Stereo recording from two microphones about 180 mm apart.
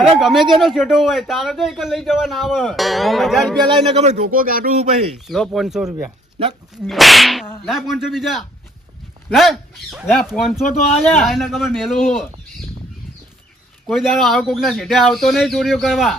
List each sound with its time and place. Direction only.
0.0 s speech: centre (ahead or behind)
3.9 s speech: 40° right (ahead or behind)
5.3 s speech: centre (ahead or behind)
13.8 s speech: centre (ahead or behind)